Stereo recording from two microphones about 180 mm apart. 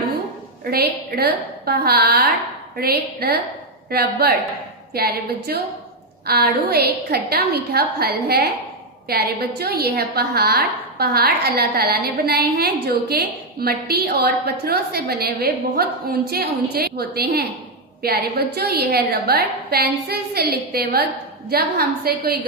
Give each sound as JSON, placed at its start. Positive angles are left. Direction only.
{"t": 0.7, "sound": "a woman's voice", "side_deg": -60}